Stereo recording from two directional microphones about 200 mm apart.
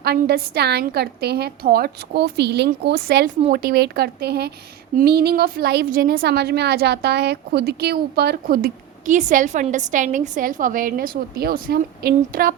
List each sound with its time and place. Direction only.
0.0 s a woman's voice: 50° right (ahead or behind)